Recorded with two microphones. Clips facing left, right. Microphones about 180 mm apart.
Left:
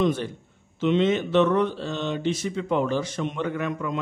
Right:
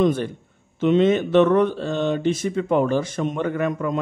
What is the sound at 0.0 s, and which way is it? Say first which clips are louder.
Speech: right 4 dB; 50° right (ahead or behind).